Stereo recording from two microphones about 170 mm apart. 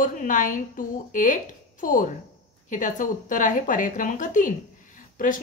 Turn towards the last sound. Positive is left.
turn(degrees=50)  # may be behind; listen again after turning